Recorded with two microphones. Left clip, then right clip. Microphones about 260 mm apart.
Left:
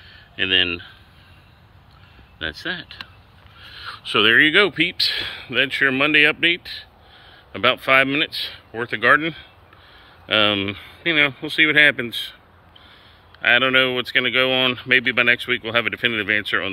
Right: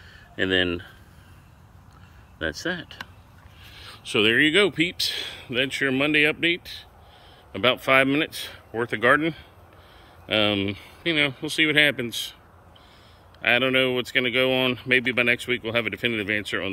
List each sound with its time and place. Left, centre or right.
0.0 s a sound: centre
2.3 s speech: centre
13.4 s speech: centre